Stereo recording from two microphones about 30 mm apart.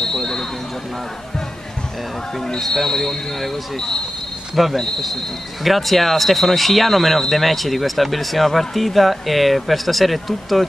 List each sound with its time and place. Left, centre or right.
0.1 s a sound: centre
2.7 s speech: centre
4.6 s speech: centre